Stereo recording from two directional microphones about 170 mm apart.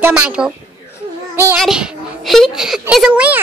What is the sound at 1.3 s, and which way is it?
Child singing, 15° right (ahead or behind).